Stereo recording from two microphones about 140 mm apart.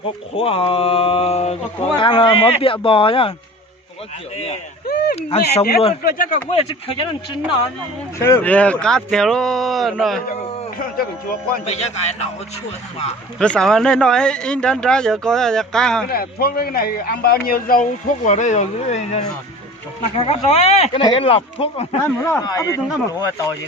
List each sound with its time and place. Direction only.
0.3 s speech: 40° left (ahead or behind)
2.0 s speech: 35° left (ahead or behind)
5.1 s speech: 45° left (ahead or behind)
6.0 s speech: 80° left
6.5 s speech: 45° left (ahead or behind)
8.2 s speech: 15° left (ahead or behind)
10.8 s a man's voice: 90° left
11.6 s speech: 50° left (ahead or behind)
13.4 s speech: 5° left (ahead or behind)
16.0 s a man's voice: 90° left
18.3 s speech: 60° left (ahead or behind); by 21.8 s 45° left (ahead or behind)
22.0 s a man's voice: 20° left (ahead or behind)